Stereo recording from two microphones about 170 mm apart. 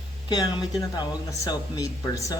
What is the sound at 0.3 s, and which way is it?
Speech, 20° left (ahead or behind).